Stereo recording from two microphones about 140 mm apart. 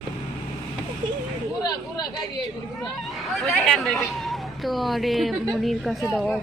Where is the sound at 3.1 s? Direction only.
Centre (ahead or behind).